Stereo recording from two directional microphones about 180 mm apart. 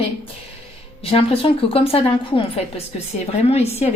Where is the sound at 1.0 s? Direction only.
30° left (ahead or behind).